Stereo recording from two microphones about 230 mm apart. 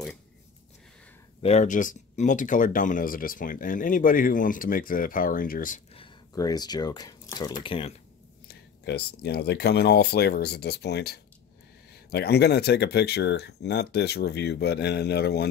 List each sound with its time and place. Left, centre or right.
1.4 s speech: left
5.9 s a sound: centre
7.6 s speech: left
8.5 s speech: left